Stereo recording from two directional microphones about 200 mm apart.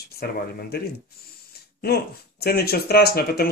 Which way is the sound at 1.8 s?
50° left (ahead or behind).